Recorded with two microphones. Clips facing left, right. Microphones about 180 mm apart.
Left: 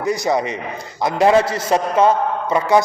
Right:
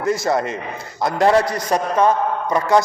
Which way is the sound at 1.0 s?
20° left (ahead or behind).